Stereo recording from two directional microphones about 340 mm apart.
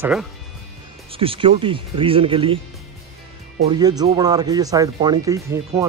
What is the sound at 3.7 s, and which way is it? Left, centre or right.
Speech, centre.